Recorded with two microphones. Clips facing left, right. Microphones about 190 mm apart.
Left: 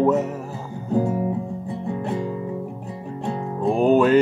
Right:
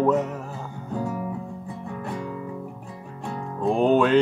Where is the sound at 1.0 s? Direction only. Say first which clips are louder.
Left 6 dB; 25° left (ahead or behind).